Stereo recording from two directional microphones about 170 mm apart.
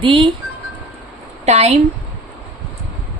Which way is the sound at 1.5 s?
40° right (ahead or behind).